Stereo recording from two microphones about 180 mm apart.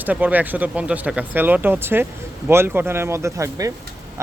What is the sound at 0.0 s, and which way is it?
Speech, 10° right (ahead or behind).